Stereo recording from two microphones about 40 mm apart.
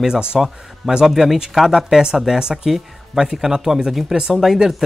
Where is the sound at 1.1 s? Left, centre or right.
Centre.